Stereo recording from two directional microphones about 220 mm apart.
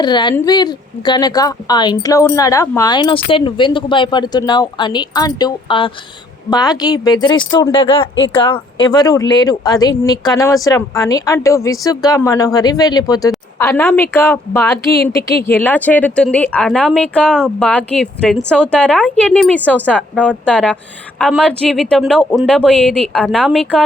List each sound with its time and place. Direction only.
0.0 s speech: 20° left (ahead or behind); by 23.8 s centre (ahead or behind)